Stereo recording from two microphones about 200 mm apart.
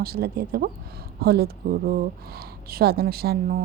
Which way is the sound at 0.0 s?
50° right (ahead or behind).